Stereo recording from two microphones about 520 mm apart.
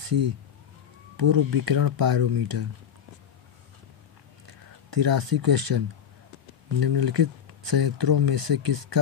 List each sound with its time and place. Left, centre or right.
0.0 s speech: right
4.9 s speech: right